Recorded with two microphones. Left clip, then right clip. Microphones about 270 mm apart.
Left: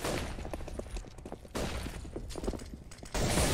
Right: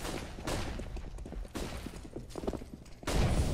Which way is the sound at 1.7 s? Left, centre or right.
Centre.